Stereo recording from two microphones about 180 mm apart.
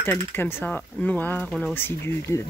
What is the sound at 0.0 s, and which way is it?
Speech, 10° left (ahead or behind).